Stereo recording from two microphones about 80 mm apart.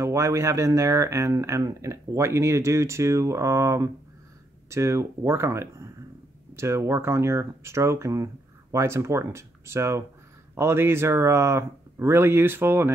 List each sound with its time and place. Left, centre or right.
0.0 s speech: right